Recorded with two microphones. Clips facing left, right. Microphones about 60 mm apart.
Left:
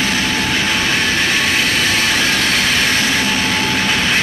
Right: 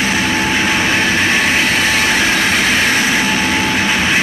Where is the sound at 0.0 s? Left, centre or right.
Centre.